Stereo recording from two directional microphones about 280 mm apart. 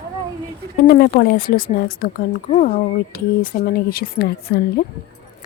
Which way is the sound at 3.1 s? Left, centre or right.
Left.